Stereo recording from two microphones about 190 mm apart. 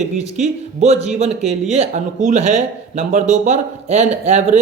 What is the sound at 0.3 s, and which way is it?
A man's voice, 35° right (ahead or behind).